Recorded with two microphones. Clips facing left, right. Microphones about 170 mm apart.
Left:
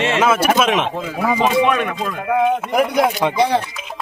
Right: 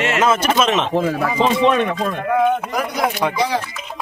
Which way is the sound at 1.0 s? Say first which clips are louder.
Right 4 dB; 50° right (ahead or behind).